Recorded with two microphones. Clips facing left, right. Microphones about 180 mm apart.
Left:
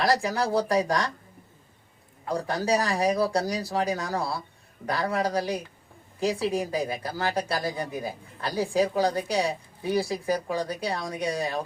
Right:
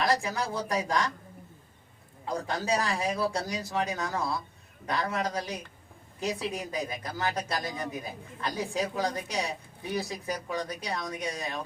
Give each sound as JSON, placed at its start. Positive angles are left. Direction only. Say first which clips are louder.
{"t": 0.0, "sound": "speech", "louder": "left 4 dB", "side_deg": 35}
{"t": 2.3, "sound": "speech", "louder": "left 4 dB", "side_deg": 35}